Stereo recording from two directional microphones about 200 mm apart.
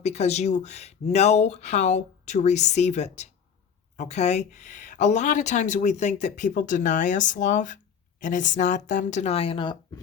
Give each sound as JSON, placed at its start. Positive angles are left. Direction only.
{"t": 0.0, "sound": "speech", "side_deg": 35}